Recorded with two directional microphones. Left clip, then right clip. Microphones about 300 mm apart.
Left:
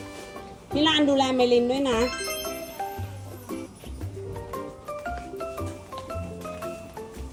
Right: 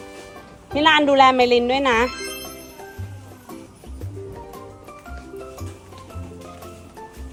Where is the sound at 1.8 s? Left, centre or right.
Right.